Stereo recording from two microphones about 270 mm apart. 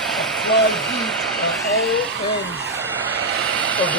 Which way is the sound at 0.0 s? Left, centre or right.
Centre.